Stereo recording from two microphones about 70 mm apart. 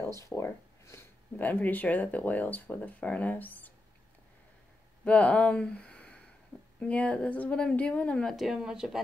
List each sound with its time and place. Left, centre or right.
0.0 s speech: left
1.4 s speech: left
5.0 s speech: centre
8.4 s speech: centre